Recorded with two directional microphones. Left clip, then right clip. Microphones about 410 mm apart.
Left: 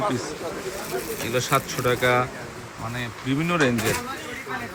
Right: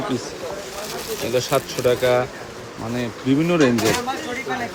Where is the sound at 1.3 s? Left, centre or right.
Centre.